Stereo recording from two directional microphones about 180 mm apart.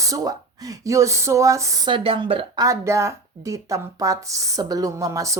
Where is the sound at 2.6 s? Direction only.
15° right (ahead or behind).